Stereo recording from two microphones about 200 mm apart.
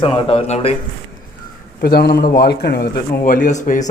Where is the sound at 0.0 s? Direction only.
25° left (ahead or behind).